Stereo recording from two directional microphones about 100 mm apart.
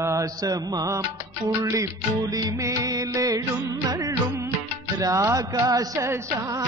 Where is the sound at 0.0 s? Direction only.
35° right (ahead or behind).